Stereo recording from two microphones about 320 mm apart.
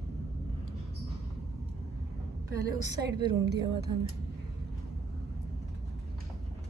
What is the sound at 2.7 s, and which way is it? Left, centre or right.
Speech, right.